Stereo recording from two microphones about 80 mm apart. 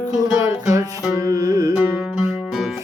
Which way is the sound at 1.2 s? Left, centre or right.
Right.